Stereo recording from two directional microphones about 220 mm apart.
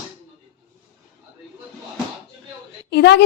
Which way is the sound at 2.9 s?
50° left (ahead or behind).